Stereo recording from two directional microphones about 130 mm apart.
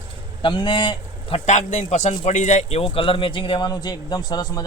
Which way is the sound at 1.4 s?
65° left (ahead or behind).